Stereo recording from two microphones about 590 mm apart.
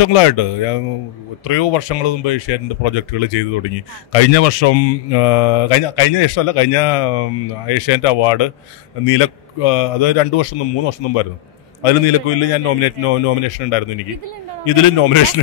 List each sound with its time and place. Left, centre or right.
0.0 s a man's voice: left
15.0 s a man's voice: left